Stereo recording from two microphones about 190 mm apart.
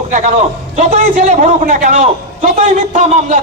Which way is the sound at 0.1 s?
40° right (ahead or behind).